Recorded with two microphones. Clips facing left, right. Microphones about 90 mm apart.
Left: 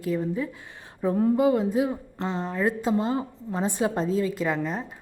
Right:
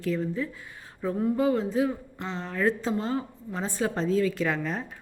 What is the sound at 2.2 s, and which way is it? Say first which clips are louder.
Speech: left 9 dB; 35° left (ahead or behind).